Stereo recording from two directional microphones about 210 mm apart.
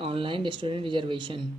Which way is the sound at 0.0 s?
25° right (ahead or behind).